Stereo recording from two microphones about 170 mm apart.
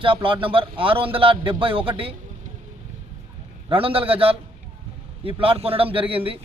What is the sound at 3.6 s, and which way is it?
A man's voice, 30° right (ahead or behind).